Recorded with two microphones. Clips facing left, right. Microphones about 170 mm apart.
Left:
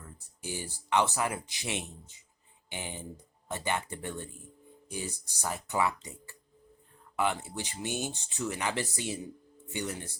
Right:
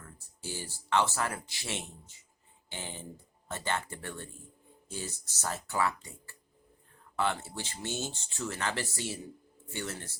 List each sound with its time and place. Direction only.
0.4 s speech: 15° left (ahead or behind)